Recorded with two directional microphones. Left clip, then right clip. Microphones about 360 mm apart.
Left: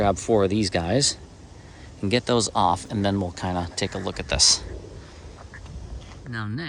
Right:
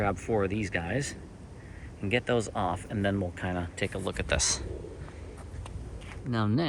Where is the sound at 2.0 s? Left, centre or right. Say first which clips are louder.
Left 6 dB; centre.